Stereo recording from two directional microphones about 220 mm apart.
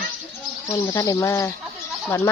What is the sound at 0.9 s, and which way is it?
Speech, 15° left (ahead or behind).